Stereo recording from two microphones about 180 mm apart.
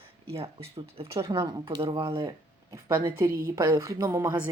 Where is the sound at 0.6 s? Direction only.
35° right (ahead or behind); by 4.5 s 10° right (ahead or behind).